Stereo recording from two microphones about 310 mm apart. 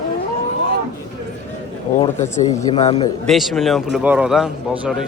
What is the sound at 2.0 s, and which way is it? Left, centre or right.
Speech, left.